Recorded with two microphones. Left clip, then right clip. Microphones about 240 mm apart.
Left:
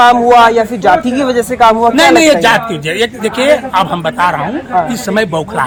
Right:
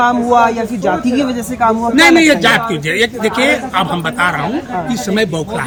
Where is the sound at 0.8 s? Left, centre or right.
Left.